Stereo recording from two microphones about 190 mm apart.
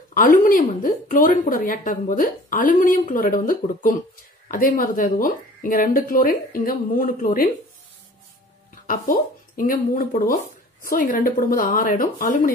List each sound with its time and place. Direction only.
0.1 s speech: 45° left (ahead or behind)
8.8 s speech: 45° left (ahead or behind)